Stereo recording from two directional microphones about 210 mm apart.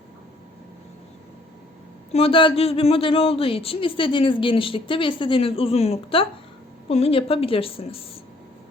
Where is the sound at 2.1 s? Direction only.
25° left (ahead or behind).